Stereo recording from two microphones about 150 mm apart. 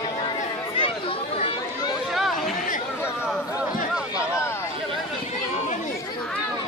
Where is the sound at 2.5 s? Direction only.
60° left (ahead or behind).